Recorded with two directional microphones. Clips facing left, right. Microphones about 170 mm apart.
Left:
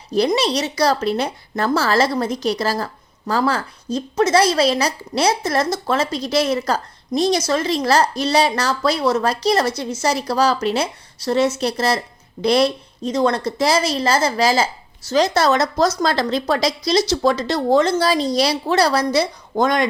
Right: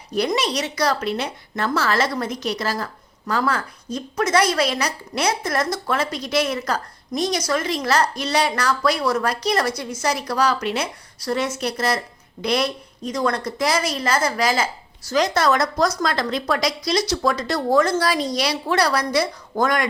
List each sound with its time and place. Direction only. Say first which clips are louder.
0.1 s speech: left 4 dB; 30° left (ahead or behind)